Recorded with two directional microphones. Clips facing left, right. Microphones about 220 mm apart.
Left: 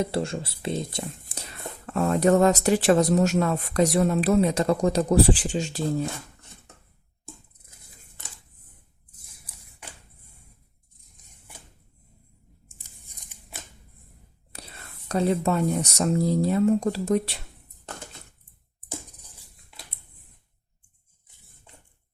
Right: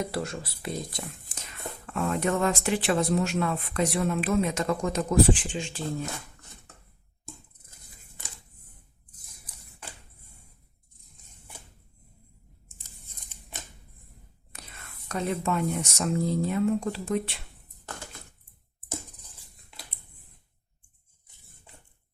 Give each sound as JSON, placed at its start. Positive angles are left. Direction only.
{"t": 0.0, "sound": "speech", "side_deg": 25}
{"t": 14.5, "sound": "speech", "side_deg": 35}